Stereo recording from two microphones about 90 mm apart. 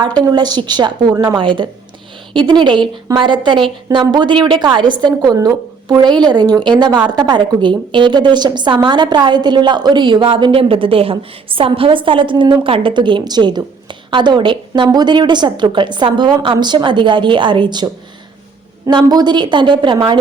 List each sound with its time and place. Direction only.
0.0 s a woman's voice: 55° right (ahead or behind)
14.8 s a woman's voice: 50° right (ahead or behind)
18.9 s a woman's voice: 50° right (ahead or behind)